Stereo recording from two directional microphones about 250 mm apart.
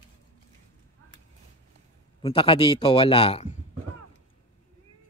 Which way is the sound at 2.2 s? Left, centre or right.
Left.